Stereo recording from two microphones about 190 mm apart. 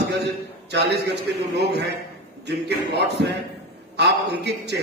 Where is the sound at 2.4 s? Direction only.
60° right (ahead or behind).